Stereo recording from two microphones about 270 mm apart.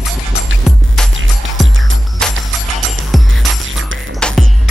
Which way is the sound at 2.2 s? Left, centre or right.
Centre.